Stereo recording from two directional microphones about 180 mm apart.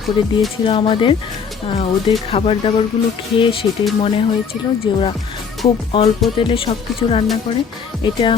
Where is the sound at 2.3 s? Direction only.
30° left (ahead or behind).